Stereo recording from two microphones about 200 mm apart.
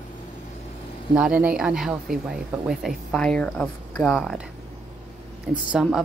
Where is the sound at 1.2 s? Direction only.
5° right (ahead or behind).